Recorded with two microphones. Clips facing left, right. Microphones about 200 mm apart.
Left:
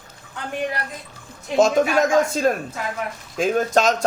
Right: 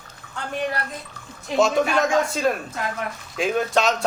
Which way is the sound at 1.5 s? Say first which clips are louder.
Left 3 dB; 45° left (ahead or behind).